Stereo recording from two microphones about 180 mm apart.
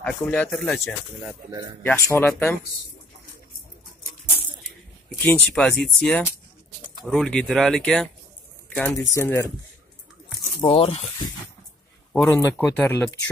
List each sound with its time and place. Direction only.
0.0 s speech: 10° left (ahead or behind)
1.8 s speech: 15° left (ahead or behind)
5.2 s speech: 10° left (ahead or behind)
10.6 s speech: 30° left (ahead or behind)
12.1 s speech: 10° left (ahead or behind)